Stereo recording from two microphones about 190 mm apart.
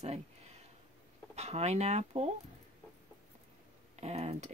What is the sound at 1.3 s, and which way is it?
Speech, 35° right (ahead or behind).